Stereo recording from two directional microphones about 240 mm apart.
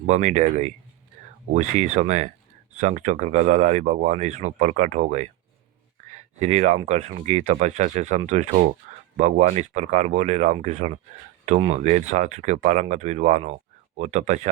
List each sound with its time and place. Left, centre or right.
0.1 s speech: right